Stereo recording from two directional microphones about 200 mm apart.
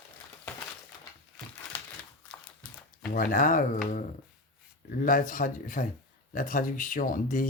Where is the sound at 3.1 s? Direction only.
45° left (ahead or behind).